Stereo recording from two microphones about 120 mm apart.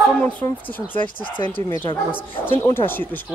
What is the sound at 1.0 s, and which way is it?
Speech, 40° left (ahead or behind).